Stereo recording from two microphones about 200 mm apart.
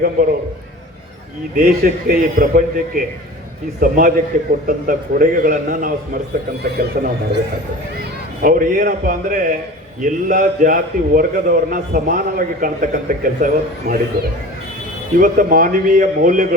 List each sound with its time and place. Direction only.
0.2 s a man's voice: 45° right (ahead or behind)
1.5 s a man's voice: 45° right (ahead or behind)
6.6 s a man's voice: 55° right (ahead or behind)
8.4 s a man's voice: 45° right (ahead or behind)